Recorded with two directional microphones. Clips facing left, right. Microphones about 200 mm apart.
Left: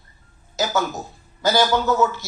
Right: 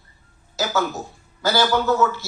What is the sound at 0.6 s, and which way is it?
Speech, 20° left (ahead or behind).